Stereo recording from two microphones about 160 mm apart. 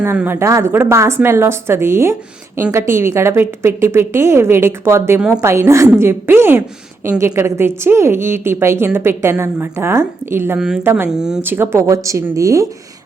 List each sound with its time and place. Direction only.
0.0 s a woman's voice: 15° right (ahead or behind)